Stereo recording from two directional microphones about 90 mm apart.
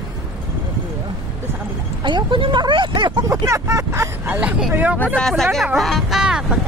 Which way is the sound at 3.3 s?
35° right (ahead or behind).